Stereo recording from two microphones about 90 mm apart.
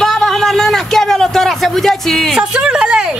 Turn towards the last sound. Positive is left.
turn(degrees=-10)  # may be behind; listen again after turning